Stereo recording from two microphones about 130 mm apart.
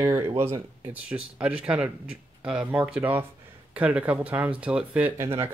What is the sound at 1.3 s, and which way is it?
Speech, 10° right (ahead or behind).